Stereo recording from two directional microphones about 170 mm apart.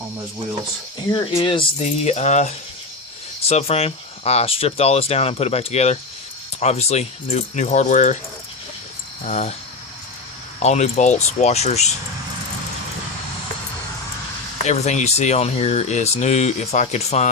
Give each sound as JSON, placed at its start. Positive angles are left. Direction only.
{"t": 1.4, "sound": "speech", "side_deg": 30}
{"t": 1.8, "sound": "speech", "side_deg": 40}
{"t": 9.2, "sound": "speech", "side_deg": 40}
{"t": 10.6, "sound": "speech", "side_deg": 40}
{"t": 14.6, "sound": "speech", "side_deg": 40}